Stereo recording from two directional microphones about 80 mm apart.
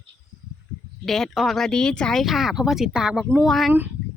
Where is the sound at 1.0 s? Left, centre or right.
Centre.